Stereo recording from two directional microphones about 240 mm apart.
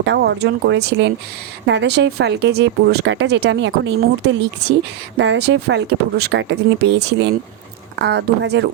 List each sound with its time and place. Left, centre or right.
0.0 s speech: right